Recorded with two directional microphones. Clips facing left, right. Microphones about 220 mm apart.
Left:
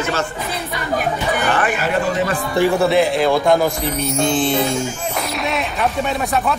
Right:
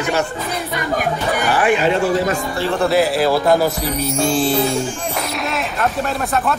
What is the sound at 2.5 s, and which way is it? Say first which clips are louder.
Speech: left 9 dB; 10° left (ahead or behind).